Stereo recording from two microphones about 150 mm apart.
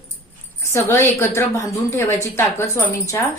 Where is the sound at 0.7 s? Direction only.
15° left (ahead or behind).